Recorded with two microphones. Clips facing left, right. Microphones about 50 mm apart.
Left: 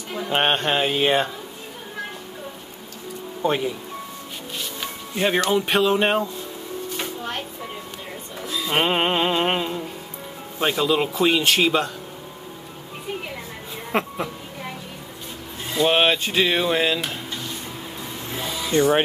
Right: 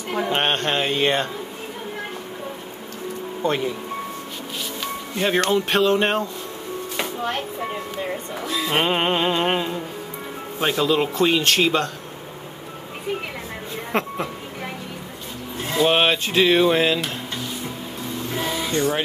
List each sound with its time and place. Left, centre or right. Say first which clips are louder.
0.3 s speech: left 3 dB; centre
3.4 s speech: even; centre
5.1 s speech: even; centre
8.6 s speech: even; centre
13.9 s a sound: even; centre
15.7 s speech: even; centre
18.4 s a sound: right 3 dB; right
18.7 s speech: left 5 dB; left